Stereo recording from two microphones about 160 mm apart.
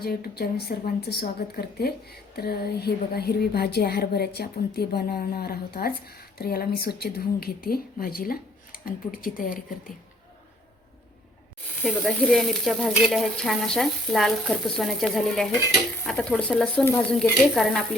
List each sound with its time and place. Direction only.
0.0 s a woman's voice: 75° left (ahead or behind)
11.8 s stir: centre (ahead or behind)